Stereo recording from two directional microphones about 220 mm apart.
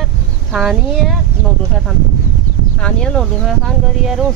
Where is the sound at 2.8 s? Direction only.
5° left (ahead or behind).